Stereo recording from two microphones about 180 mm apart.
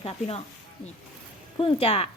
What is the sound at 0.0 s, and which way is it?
Speech, 35° left (ahead or behind).